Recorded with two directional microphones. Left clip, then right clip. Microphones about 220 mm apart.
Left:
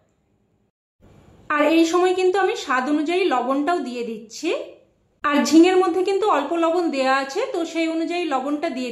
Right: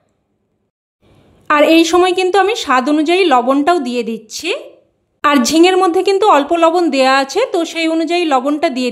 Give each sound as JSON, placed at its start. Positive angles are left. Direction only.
{"t": 1.5, "sound": "a woman's voice", "side_deg": -45}